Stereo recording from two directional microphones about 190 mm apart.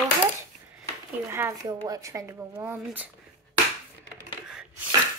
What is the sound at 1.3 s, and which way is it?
Speech, 15° right (ahead or behind).